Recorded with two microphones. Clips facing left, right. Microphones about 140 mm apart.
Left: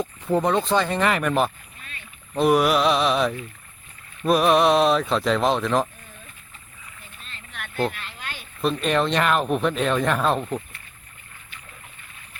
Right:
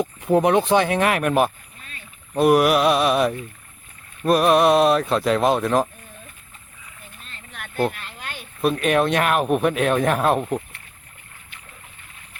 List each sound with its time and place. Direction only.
0.0 s speech: 15° right (ahead or behind)
7.3 s a sound: 40° right (ahead or behind)
8.6 s speech: 5° right (ahead or behind)